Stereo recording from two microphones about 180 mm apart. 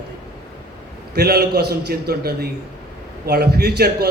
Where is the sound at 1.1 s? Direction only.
60° right (ahead or behind).